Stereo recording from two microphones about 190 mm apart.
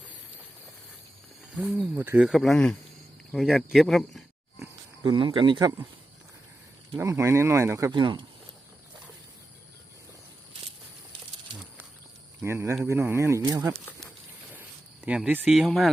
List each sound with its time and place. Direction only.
1.5 s speech: 5° right (ahead or behind)
5.0 s speech: 25° right (ahead or behind)
6.9 s speech: 15° right (ahead or behind)
12.4 s speech: 15° right (ahead or behind)
15.0 s speech: 5° right (ahead or behind)